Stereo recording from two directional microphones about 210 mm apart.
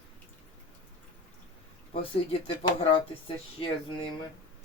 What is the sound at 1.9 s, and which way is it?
Speech, 25° left (ahead or behind).